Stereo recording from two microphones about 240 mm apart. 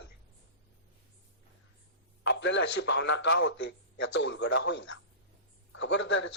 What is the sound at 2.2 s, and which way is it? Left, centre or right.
A man's voice, left.